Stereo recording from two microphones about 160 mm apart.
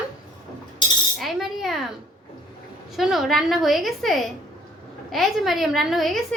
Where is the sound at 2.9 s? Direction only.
Centre (ahead or behind).